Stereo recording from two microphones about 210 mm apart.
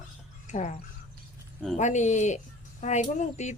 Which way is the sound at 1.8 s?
35° left (ahead or behind).